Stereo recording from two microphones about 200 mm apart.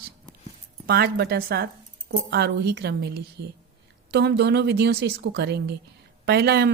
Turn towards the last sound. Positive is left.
turn(degrees=-55)  # may be behind; listen again after turning